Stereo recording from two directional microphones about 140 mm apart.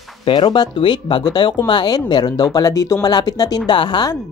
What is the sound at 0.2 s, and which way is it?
Speech, 35° left (ahead or behind).